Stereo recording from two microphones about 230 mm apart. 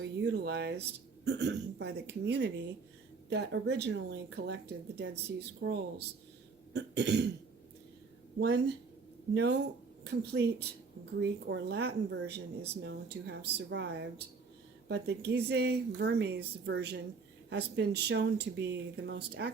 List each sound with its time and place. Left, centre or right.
0.3 s speech: right
8.4 s speech: right